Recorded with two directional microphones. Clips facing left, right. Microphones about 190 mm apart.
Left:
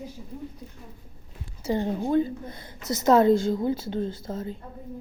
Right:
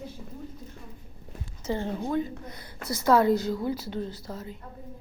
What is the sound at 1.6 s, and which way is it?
Speech, 15° left (ahead or behind).